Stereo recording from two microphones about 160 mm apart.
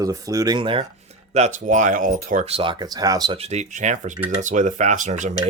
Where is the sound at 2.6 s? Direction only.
30° right (ahead or behind).